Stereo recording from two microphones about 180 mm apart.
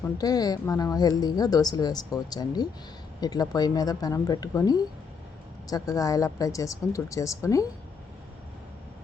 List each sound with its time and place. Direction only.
0.2 s a woman's voice: 20° left (ahead or behind)